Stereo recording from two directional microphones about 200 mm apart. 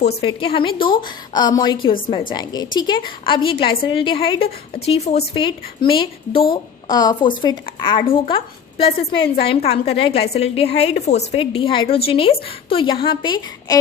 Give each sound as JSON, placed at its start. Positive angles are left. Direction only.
{"t": 0.2, "sound": "a woman's voice", "side_deg": 25}